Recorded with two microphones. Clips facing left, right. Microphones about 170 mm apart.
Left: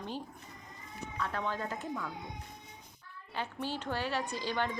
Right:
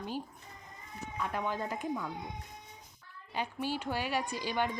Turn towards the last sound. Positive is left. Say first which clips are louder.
# right 1 dB
turn(degrees=-15)  # may be behind; listen again after turning